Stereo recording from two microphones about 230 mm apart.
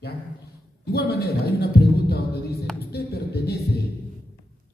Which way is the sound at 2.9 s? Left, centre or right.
Left.